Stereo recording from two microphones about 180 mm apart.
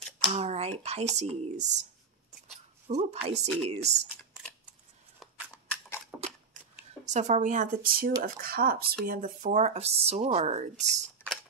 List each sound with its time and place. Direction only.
0.3 s speech: 35° right (ahead or behind)
2.9 s speech: 35° right (ahead or behind)
7.1 s speech: 40° right (ahead or behind)